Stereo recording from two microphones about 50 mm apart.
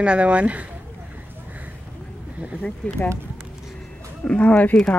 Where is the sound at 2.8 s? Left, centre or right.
Left.